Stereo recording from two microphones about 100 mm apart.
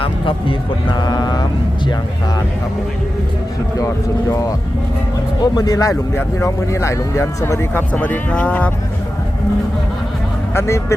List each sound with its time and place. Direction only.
0.0 s speech: 60° left (ahead or behind); by 1.5 s 45° left (ahead or behind)
3.8 s speech: 30° left (ahead or behind); by 8.7 s 15° left (ahead or behind)
10.5 s speech: 25° left (ahead or behind)